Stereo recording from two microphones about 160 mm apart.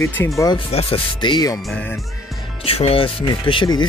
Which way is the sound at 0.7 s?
35° left (ahead or behind).